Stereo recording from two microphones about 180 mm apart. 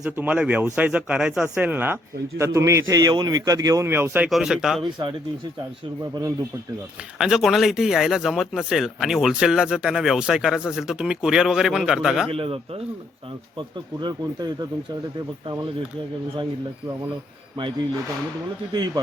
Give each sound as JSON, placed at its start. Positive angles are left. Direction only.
{"t": 0.0, "sound": "speech", "side_deg": -5}
{"t": 4.8, "sound": "speech", "side_deg": -25}
{"t": 7.2, "sound": "speech", "side_deg": 0}
{"t": 12.3, "sound": "a man's voice", "side_deg": -30}
{"t": 18.7, "sound": "speech", "side_deg": -25}